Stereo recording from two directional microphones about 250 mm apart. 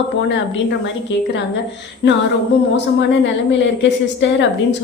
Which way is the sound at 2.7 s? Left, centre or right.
Left.